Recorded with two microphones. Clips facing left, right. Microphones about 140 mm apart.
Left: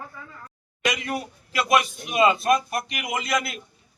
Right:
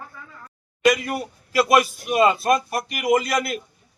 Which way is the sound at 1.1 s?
5° right (ahead or behind).